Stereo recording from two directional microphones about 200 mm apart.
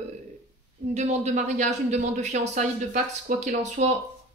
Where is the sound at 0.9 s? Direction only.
35° right (ahead or behind).